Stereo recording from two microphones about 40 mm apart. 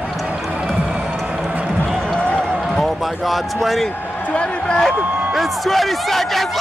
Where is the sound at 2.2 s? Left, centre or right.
Left.